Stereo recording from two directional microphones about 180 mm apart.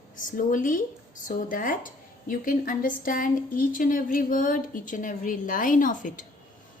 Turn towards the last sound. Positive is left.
turn(degrees=45)  # may be behind; listen again after turning